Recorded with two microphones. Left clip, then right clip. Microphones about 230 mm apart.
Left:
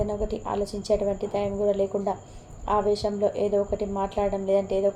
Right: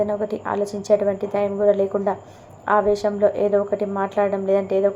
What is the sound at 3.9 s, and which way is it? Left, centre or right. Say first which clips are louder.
Speech: right 7 dB; right.